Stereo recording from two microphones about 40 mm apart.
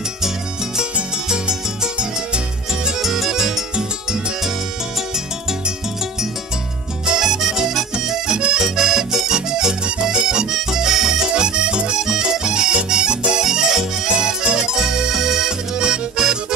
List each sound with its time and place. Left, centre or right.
1.5 s music: centre
7.2 s music: centre
15.8 s accordion: centre